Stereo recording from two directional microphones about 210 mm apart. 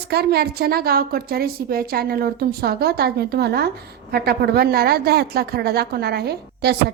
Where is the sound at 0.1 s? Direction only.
50° right (ahead or behind).